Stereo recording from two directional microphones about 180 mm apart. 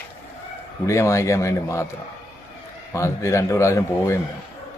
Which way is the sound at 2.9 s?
15° left (ahead or behind).